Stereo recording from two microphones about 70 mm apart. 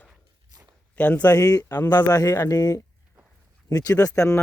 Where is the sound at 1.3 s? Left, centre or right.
Left.